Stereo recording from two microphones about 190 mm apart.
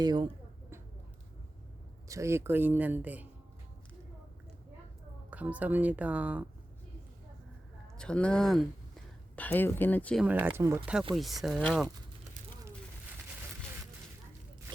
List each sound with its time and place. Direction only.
0.0 s speech: 25° right (ahead or behind)
2.0 s speech: 15° right (ahead or behind)
5.3 s speech: 10° right (ahead or behind)
7.9 s speech: 5° left (ahead or behind)
10.2 s speech: 10° right (ahead or behind)
11.1 s speech: centre (ahead or behind)